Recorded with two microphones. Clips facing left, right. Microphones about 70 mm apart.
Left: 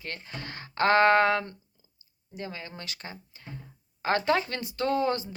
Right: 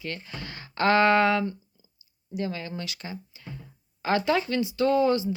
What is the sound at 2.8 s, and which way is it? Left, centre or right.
Speech, left.